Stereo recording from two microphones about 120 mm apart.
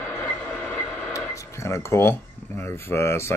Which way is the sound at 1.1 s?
25° left (ahead or behind).